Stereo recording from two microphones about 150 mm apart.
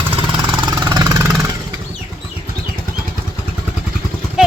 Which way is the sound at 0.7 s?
25° right (ahead or behind).